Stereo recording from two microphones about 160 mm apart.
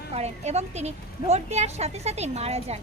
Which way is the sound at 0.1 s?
45° right (ahead or behind).